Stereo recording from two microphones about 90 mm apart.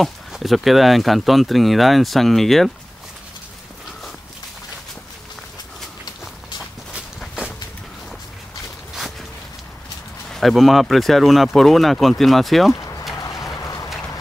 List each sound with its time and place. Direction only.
0.0 s speech: centre (ahead or behind)
10.3 s speech: centre (ahead or behind)
12.7 s a sound: 40° left (ahead or behind)